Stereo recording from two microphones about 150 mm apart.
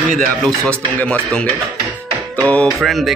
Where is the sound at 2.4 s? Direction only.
5° left (ahead or behind).